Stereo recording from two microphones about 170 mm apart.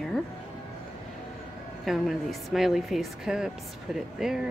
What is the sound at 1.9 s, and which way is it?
A woman's voice, centre (ahead or behind).